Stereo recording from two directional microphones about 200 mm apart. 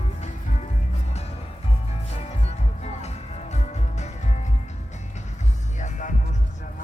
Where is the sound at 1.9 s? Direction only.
30° left (ahead or behind).